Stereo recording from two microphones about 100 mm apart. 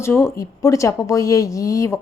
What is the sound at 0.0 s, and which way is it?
A woman's voice, 25° left (ahead or behind).